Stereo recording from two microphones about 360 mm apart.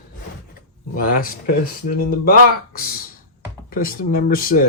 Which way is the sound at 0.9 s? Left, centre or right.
Left.